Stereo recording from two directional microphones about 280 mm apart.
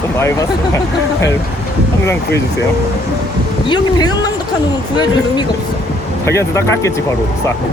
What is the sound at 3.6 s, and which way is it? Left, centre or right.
Speech, centre.